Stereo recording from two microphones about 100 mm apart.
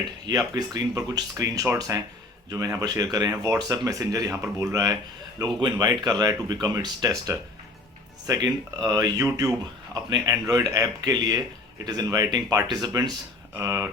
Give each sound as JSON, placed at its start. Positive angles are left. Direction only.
{"t": 0.3, "sound": "speech", "side_deg": -35}